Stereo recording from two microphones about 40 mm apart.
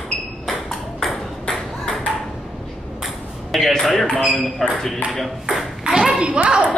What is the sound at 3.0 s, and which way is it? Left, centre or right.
Ping, centre.